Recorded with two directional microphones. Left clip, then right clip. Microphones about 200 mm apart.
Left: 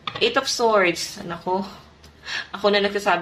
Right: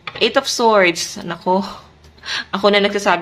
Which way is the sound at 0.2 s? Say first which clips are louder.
Right 5 dB; 25° right (ahead or behind).